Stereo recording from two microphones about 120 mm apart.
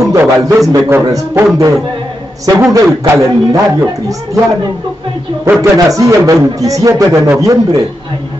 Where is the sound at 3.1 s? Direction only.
20° right (ahead or behind).